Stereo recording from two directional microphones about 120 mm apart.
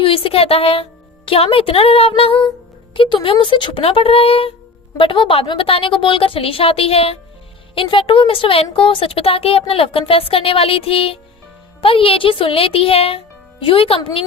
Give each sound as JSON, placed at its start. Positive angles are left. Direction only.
{"t": 0.0, "sound": "a woman's voice", "side_deg": 50}